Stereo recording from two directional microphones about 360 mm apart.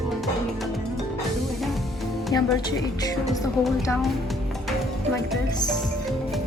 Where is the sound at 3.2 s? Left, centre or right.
Centre.